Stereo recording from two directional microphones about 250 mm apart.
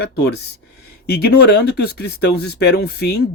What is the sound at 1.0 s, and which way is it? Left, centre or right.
Speech, left.